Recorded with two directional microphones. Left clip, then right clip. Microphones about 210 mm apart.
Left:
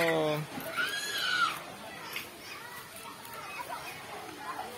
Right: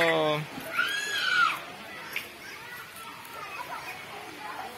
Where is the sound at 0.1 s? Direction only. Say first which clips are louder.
Right 4 dB; centre (ahead or behind).